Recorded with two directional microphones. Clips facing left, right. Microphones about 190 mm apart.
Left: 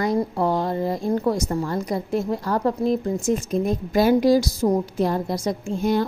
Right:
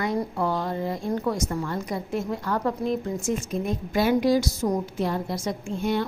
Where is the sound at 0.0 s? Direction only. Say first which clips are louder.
Left 4 dB; 35° left (ahead or behind).